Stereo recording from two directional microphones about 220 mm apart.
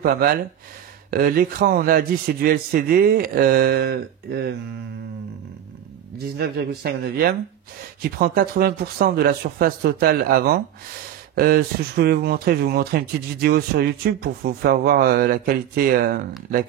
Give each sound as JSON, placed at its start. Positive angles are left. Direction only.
{"t": 0.0, "sound": "a man's voice", "side_deg": -40}
{"t": 6.3, "sound": "speech", "side_deg": -45}